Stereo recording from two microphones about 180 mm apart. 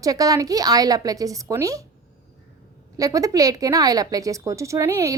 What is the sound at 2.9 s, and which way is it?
A woman's voice, 20° right (ahead or behind).